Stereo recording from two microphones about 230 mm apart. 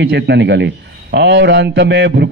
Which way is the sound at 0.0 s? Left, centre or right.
Right.